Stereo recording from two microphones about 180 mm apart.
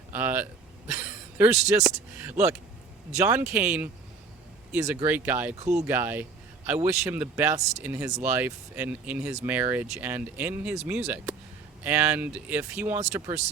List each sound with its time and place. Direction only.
0.1 s speech: 10° right (ahead or behind)
5.5 s speech: 40° right (ahead or behind)
5.8 s speech: 10° right (ahead or behind)